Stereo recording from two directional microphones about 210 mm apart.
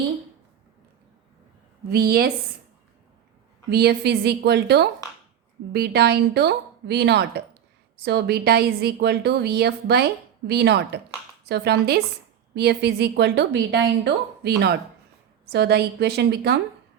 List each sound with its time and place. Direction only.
1.9 s a woman's voice: 45° right (ahead or behind)
3.7 s a woman's voice: 50° right (ahead or behind)